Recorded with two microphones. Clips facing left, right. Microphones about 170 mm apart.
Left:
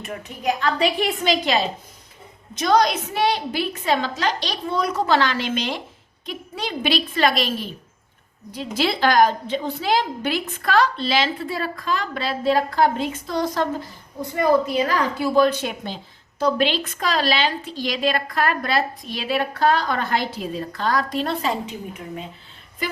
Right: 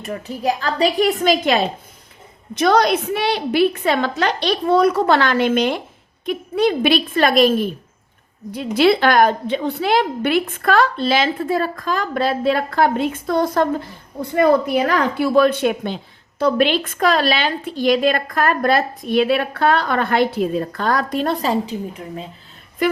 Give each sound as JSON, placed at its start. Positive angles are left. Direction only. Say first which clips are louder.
{"t": 0.0, "sound": "a woman's voice", "louder": "right 4 dB", "side_deg": -35}
{"t": 8.5, "sound": "a woman's voice", "louder": "right 8 dB", "side_deg": -60}